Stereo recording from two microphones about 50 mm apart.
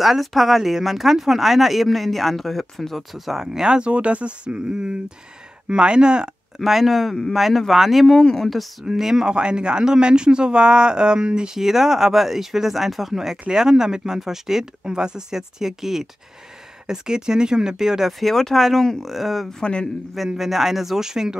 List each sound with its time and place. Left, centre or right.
0.0 s speech: centre
6.6 s speech: centre
8.2 s speech: centre
8.8 s speech: centre
9.3 s speech: centre
18.2 s speech: centre
19.6 s speech: centre
20.3 s speech: centre